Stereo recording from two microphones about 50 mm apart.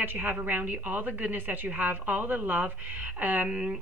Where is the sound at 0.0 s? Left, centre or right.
Right.